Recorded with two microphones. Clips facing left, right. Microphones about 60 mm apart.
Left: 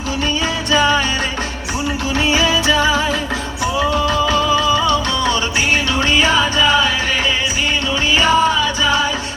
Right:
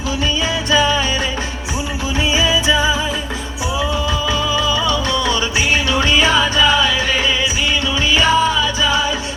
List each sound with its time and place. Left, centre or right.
0.7 s music: left
2.1 s music: left
8.1 s music: left